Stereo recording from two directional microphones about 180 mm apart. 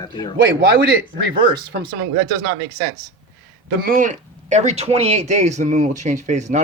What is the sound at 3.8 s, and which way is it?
Speech, 50° right (ahead or behind).